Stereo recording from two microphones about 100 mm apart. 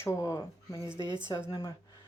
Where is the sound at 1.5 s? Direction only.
35° left (ahead or behind).